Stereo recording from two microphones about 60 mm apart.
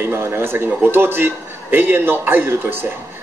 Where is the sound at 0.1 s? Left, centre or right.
Right.